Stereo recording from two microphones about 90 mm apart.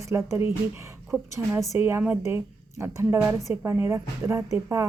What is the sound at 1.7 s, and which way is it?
A woman's voice, 30° right (ahead or behind).